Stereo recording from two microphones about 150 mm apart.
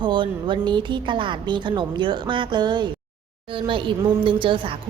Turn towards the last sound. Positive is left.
turn(degrees=-35)  # may be behind; listen again after turning